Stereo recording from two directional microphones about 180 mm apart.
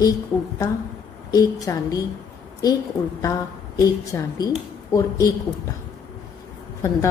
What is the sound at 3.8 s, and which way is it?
A woman's voice, 20° left (ahead or behind).